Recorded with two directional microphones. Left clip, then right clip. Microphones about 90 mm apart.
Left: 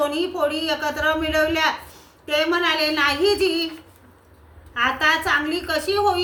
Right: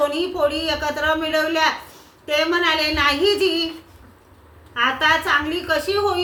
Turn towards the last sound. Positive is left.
turn(degrees=35)  # may be behind; listen again after turning